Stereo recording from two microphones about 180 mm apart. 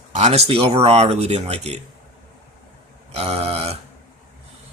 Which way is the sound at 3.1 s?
35° right (ahead or behind).